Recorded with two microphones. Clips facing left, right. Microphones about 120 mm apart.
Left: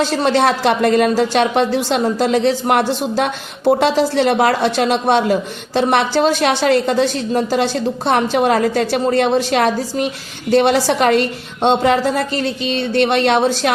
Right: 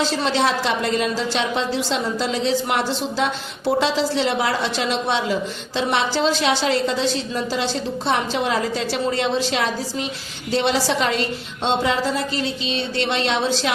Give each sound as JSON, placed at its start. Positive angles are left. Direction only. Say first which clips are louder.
{"t": 0.0, "sound": "a man's voice", "louder": "left 5 dB", "side_deg": 55}